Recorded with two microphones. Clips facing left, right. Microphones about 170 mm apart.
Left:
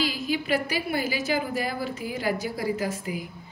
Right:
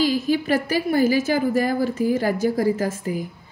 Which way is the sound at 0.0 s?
45° right (ahead or behind).